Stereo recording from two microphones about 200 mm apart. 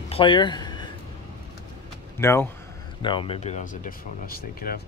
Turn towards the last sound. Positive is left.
turn(degrees=50)  # may be behind; listen again after turning